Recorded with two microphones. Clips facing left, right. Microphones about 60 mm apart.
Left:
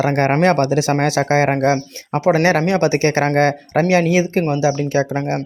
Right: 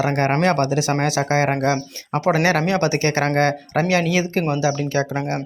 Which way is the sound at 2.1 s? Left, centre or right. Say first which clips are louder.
Left 3 dB; centre.